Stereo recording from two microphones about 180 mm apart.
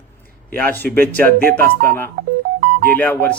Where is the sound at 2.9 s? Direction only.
10° left (ahead or behind).